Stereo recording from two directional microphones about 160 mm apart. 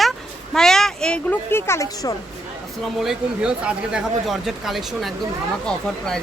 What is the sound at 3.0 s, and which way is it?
Speech, 5° right (ahead or behind).